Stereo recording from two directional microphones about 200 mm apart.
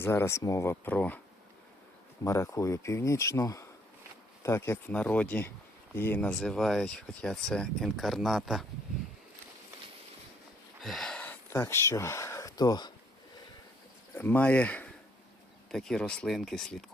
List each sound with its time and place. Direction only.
0.0 s speech: 10° left (ahead or behind)
2.2 s speech: 15° left (ahead or behind); by 8.6 s centre (ahead or behind)
10.8 s a sound: centre (ahead or behind); by 12.9 s 20° left (ahead or behind)
14.2 s speech: 10° left (ahead or behind)